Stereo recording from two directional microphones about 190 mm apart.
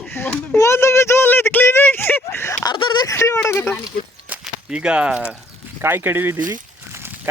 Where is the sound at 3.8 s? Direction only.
5° right (ahead or behind).